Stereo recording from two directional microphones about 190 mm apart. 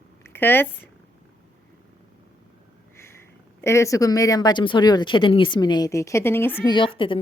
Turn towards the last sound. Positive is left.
turn(degrees=25)  # may be behind; listen again after turning